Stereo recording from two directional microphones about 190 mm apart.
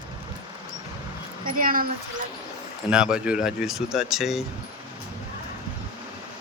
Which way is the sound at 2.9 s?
5° right (ahead or behind).